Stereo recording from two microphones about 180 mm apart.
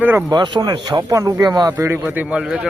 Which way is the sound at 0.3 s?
25° right (ahead or behind).